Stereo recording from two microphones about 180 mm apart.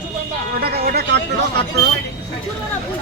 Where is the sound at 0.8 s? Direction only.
65° right (ahead or behind).